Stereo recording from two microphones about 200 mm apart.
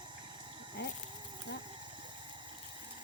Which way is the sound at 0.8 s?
55° left (ahead or behind).